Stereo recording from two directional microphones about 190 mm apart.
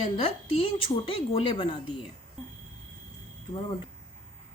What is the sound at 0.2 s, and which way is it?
A woman's voice, 30° left (ahead or behind).